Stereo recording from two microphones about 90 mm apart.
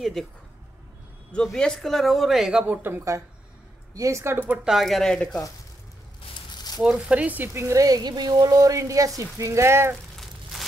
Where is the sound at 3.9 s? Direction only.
35° right (ahead or behind).